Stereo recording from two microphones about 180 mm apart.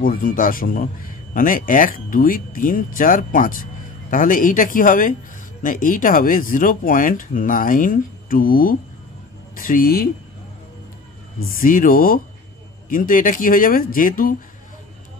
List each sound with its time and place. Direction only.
0.0 s speech: 50° left (ahead or behind)
11.5 s speech: 50° left (ahead or behind)